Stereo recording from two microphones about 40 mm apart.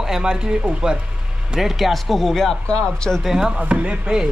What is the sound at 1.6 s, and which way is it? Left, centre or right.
Speech, centre.